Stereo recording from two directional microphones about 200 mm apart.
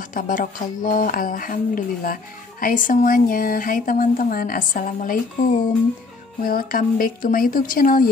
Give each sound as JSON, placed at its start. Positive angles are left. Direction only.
{"t": 0.1, "sound": "speech", "side_deg": 45}
{"t": 6.4, "sound": "speech", "side_deg": 45}